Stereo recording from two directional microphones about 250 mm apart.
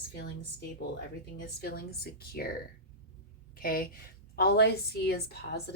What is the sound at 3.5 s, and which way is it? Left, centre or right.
A woman's voice, left.